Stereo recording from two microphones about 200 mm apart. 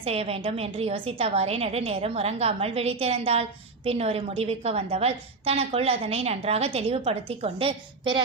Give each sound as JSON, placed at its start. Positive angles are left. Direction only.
{"t": 0.0, "sound": "a woman's voice", "side_deg": -30}